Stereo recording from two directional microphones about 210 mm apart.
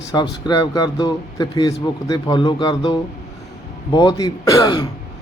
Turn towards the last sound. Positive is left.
turn(degrees=20)  # may be behind; listen again after turning